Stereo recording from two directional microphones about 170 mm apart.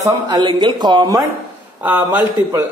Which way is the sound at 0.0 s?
25° right (ahead or behind).